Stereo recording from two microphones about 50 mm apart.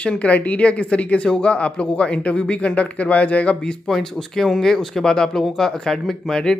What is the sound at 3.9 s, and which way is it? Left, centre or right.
Speech, centre.